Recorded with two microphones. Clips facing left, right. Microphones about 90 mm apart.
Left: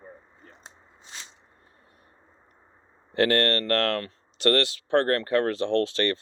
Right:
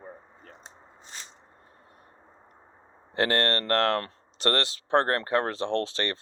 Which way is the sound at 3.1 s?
25° right (ahead or behind).